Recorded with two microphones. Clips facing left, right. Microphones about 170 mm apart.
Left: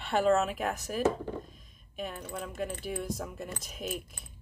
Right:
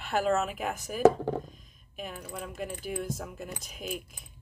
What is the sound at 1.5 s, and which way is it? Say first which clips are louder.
Keys jangling: right 3 dB; centre (ahead or behind).